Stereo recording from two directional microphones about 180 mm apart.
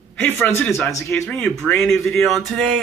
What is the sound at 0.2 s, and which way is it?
Speech, 10° left (ahead or behind).